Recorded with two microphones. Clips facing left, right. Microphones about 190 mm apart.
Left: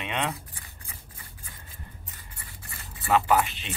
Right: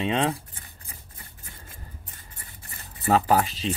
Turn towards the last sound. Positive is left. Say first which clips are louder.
# right 2 dB
turn(degrees=-35)  # may be behind; listen again after turning